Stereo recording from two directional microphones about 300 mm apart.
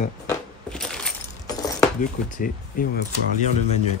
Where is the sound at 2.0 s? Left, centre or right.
Left.